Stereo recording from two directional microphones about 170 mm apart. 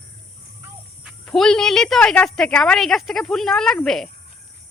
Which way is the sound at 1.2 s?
5° left (ahead or behind).